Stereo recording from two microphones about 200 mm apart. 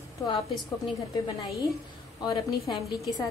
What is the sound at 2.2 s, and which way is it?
Speech, 20° left (ahead or behind).